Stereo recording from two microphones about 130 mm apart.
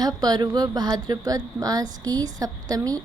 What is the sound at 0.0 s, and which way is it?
A woman's voice, 30° right (ahead or behind).